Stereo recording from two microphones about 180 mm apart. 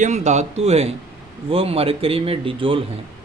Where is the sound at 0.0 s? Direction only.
40° right (ahead or behind).